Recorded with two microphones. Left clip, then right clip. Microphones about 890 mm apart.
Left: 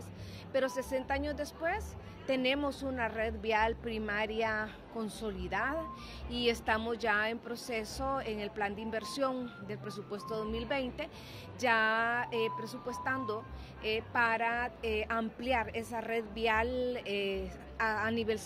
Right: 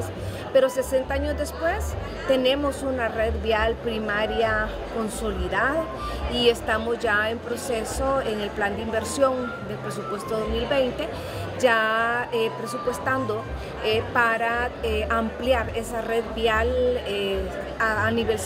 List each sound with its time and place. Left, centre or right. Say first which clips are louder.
0.6 s a woman's voice: right 13 dB; left
10.3 s a woman's voice: right 12 dB; left
13.8 s a woman's voice: right 10 dB; left